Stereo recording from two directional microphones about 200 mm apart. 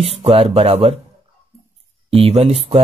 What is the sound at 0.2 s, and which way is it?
Speech, 30° right (ahead or behind).